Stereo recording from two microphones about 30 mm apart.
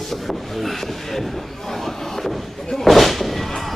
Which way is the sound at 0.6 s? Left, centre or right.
Centre.